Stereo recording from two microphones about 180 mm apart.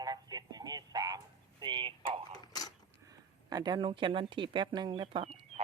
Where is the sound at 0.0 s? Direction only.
20° right (ahead or behind).